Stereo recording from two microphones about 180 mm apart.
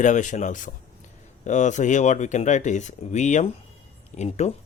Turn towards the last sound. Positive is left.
turn(degrees=40)  # may be behind; listen again after turning